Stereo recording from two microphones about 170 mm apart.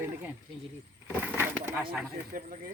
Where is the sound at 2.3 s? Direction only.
55° right (ahead or behind).